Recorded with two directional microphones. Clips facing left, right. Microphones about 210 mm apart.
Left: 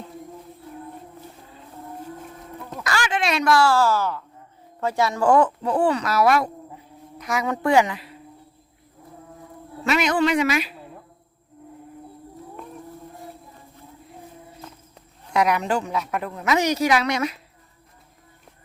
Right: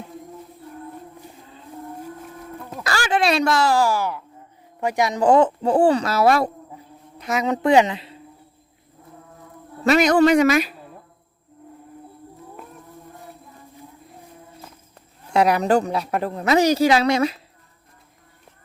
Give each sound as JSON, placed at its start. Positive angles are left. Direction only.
{"t": 2.8, "sound": "speech", "side_deg": -35}
{"t": 9.8, "sound": "a man's voice", "side_deg": -40}
{"t": 15.3, "sound": "a woman's voice", "side_deg": -30}